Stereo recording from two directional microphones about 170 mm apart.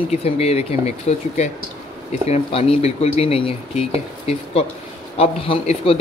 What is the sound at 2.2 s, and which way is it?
A man's voice, 35° left (ahead or behind).